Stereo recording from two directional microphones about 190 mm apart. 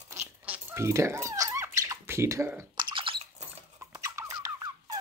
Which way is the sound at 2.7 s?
30° right (ahead or behind).